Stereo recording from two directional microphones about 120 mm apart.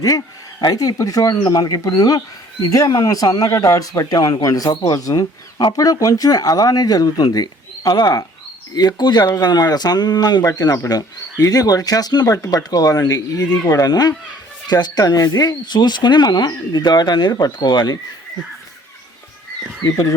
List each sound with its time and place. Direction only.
0.6 s speech: 30° left (ahead or behind)
19.8 s speech: 35° left (ahead or behind)